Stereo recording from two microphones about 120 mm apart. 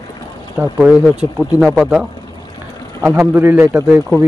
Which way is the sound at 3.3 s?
20° right (ahead or behind).